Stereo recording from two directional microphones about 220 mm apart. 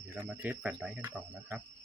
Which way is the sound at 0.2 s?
10° right (ahead or behind).